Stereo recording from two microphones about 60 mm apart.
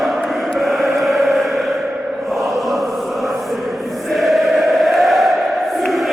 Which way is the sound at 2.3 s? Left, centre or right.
Centre.